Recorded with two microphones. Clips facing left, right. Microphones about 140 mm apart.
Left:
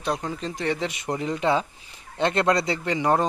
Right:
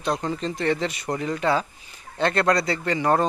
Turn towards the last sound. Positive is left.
turn(degrees=15)  # may be behind; listen again after turning